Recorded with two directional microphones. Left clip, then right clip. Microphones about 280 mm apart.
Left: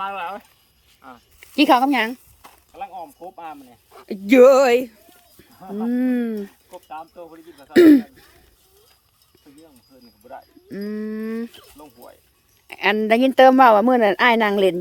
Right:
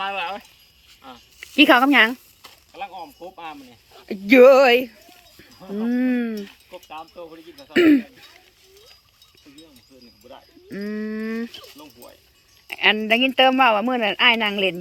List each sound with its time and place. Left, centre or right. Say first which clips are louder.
0.0 s speech: right 1 dB; centre
10.2 s speech: left 4 dB; centre